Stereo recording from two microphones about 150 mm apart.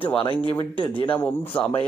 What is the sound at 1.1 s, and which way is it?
Speech, 15° left (ahead or behind).